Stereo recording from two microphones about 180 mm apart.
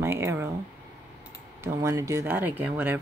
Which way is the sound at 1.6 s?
15° right (ahead or behind).